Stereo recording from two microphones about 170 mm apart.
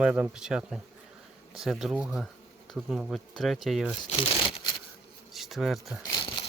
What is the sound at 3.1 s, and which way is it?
Speech, centre (ahead or behind).